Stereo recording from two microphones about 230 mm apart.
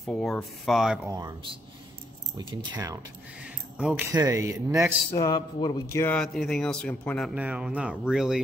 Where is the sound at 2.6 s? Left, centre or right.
Centre.